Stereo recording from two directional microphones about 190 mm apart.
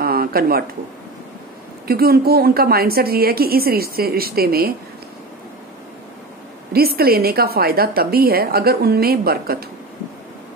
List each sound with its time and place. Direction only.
0.0 s a sound: 50° right (ahead or behind)
1.9 s a woman's voice: 55° right (ahead or behind)
6.7 s a woman's voice: 55° right (ahead or behind)